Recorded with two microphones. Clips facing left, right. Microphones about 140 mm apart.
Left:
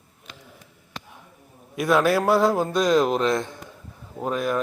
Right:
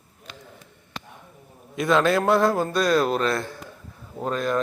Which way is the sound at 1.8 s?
10° left (ahead or behind).